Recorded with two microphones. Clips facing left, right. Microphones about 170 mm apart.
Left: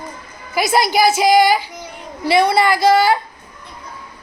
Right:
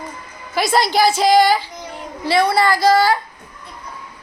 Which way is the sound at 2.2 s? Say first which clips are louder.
Left 2 dB; 15° left (ahead or behind).